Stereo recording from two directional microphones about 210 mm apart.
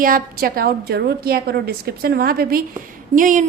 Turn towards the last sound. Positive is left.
turn(degrees=-40)  # may be behind; listen again after turning